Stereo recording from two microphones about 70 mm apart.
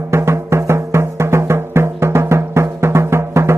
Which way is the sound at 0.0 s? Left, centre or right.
Right.